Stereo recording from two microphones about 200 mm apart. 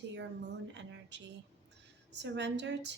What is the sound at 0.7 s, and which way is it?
Speech, 60° right (ahead or behind).